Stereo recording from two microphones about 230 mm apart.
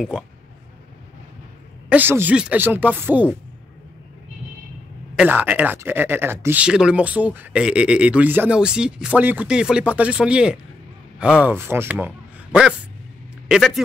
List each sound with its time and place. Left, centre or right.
1.9 s speech: centre
5.1 s speech: centre
13.5 s speech: centre